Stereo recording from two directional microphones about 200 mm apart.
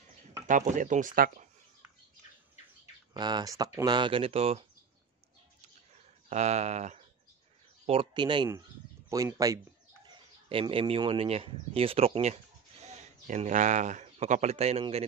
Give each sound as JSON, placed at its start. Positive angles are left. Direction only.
{"t": 0.5, "sound": "speech", "side_deg": -40}
{"t": 3.1, "sound": "speech", "side_deg": -20}
{"t": 6.2, "sound": "speech", "side_deg": -35}
{"t": 10.0, "sound": "speech", "side_deg": -25}